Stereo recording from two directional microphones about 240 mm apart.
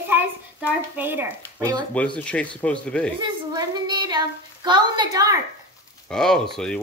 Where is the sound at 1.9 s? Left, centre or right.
Centre.